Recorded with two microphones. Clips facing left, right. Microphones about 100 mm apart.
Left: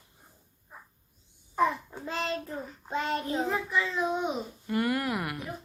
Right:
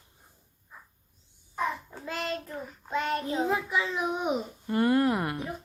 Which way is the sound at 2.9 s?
30° left (ahead or behind).